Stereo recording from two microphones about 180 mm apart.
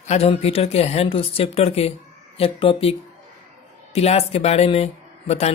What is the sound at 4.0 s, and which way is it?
Speech, 35° left (ahead or behind).